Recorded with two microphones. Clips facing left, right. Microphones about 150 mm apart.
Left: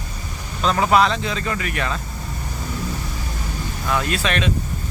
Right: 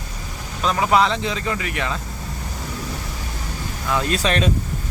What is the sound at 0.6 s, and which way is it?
Speech, 10° right (ahead or behind).